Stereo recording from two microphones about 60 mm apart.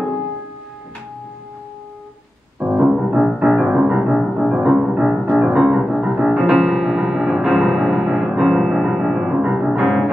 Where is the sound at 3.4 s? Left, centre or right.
Centre.